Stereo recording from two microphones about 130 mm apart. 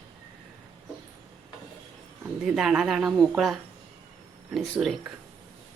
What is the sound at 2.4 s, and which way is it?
Speech, 5° right (ahead or behind).